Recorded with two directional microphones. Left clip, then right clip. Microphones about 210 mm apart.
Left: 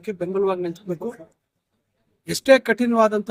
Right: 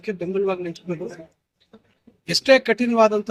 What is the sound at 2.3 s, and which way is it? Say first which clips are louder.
Speech: even; 15° left (ahead or behind).